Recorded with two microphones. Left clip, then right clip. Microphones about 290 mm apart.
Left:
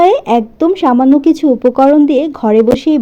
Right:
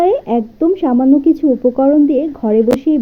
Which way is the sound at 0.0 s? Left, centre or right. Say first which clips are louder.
Left 5 dB; left.